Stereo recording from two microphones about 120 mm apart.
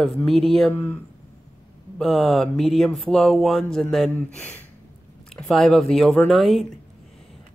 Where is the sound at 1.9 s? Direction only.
Centre (ahead or behind).